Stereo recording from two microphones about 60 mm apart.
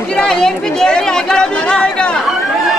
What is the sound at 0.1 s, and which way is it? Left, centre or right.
Chatter, centre.